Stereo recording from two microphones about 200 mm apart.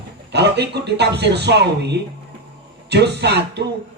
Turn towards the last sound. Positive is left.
turn(degrees=-55)  # may be behind; listen again after turning